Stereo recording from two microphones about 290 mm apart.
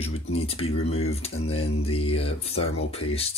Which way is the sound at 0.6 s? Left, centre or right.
Left.